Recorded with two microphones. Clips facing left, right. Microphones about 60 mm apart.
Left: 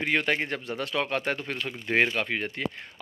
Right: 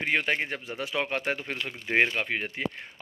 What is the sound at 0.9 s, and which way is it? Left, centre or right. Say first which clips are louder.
Speech: left 1 dB; centre.